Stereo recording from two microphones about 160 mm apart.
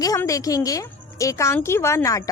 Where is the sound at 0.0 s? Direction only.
20° left (ahead or behind).